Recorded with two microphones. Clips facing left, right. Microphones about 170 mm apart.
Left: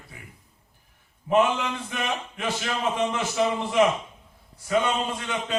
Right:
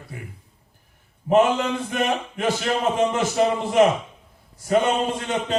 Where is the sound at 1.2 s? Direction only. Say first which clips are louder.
Right 4 dB; 40° right (ahead or behind).